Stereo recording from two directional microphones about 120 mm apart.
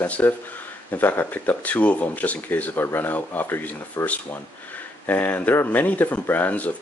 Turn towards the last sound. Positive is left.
turn(degrees=15)  # may be behind; listen again after turning